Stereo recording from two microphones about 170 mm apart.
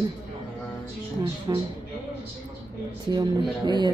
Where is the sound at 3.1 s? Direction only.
25° right (ahead or behind).